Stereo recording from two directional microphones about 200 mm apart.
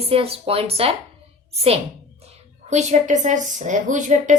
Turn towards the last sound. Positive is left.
turn(degrees=-40)  # may be behind; listen again after turning